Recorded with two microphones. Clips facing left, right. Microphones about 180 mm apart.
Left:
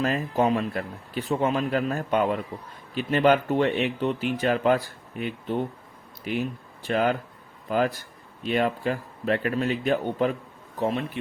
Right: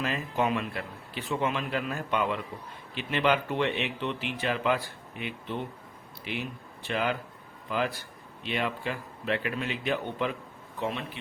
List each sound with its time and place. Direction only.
0.0 s a man's voice: 40° left (ahead or behind)